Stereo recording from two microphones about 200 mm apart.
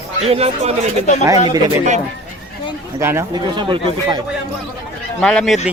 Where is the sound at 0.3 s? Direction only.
30° right (ahead or behind).